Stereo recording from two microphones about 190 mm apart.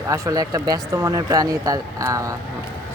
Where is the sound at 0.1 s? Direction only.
20° right (ahead or behind).